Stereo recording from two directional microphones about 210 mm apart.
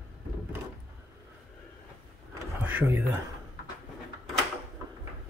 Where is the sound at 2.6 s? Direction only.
10° right (ahead or behind).